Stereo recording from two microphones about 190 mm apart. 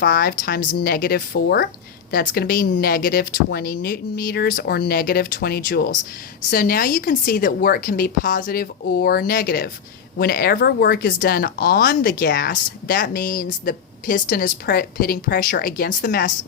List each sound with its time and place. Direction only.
0.0 s speech: 50° left (ahead or behind)